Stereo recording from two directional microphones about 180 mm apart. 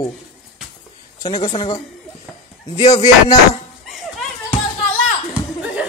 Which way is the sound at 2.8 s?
35° left (ahead or behind).